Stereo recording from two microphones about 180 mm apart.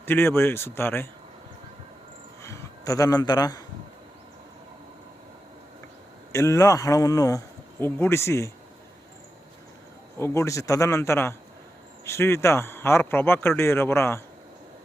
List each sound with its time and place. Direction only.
0.0 s speech: 10° left (ahead or behind)
2.4 s a sound: 15° left (ahead or behind)
6.3 s speech: 15° left (ahead or behind)
10.2 s speech: 15° left (ahead or behind)